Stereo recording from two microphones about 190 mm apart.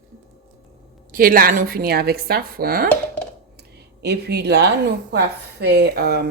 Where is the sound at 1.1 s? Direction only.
50° right (ahead or behind).